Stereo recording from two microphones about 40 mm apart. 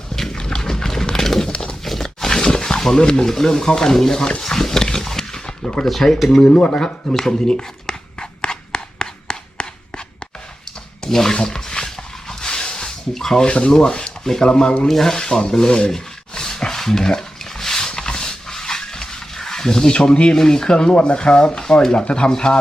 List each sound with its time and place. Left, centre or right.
0.2 s dog: centre
1.8 s roaring cats: centre
4.4 s pig: centre
6.1 s speech: centre
6.4 s speech: left
6.7 s a sound: centre
11.0 s speech: centre
11.3 s a sound: centre
13.5 s speech: left
14.8 s speech: centre
15.9 s dog: centre
20.3 s speech: centre